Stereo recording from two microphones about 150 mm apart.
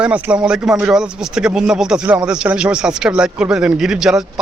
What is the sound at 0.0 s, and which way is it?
Speech, 10° right (ahead or behind).